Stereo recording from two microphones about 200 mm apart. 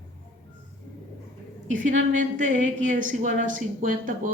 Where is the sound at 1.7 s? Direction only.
40° right (ahead or behind).